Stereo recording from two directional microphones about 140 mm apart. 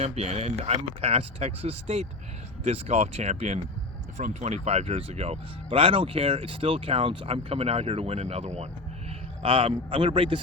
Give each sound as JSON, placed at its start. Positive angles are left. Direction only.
{"t": 0.0, "sound": "speech", "side_deg": -50}
{"t": 9.4, "sound": "speech", "side_deg": -40}